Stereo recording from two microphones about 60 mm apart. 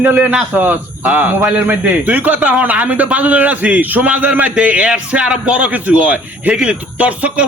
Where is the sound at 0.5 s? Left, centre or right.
Right.